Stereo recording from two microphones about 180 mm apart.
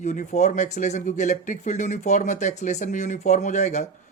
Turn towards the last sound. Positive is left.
turn(degrees=40)  # may be behind; listen again after turning